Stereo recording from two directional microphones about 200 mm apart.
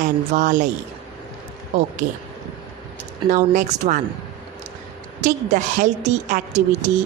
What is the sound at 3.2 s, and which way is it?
Speech, 40° right (ahead or behind).